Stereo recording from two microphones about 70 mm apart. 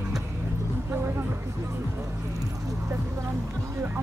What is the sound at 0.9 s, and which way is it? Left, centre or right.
Speech, right.